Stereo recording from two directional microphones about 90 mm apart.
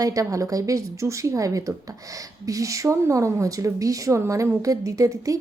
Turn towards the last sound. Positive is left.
turn(degrees=-40)  # may be behind; listen again after turning